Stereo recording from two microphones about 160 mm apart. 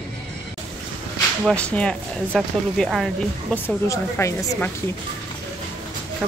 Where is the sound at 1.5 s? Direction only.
5° left (ahead or behind).